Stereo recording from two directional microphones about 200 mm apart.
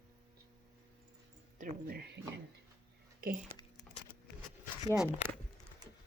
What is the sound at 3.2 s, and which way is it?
Speech, 45° right (ahead or behind).